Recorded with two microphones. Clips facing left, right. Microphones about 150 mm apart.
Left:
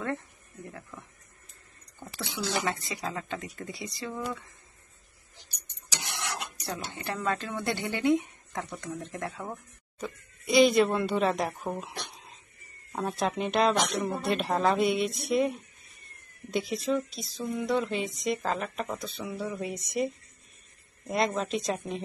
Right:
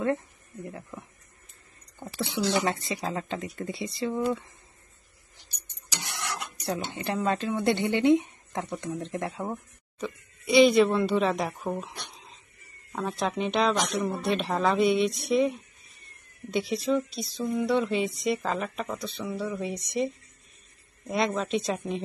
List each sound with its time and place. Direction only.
2.0 s speech: 25° right (ahead or behind)
5.9 s dishes: 15° left (ahead or behind)
6.6 s speech: 20° right (ahead or behind)
9.9 s speech: centre (ahead or behind)
12.9 s speech: 5° left (ahead or behind)
21.1 s speech: centre (ahead or behind)